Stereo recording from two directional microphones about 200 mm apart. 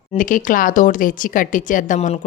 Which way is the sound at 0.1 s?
40° left (ahead or behind).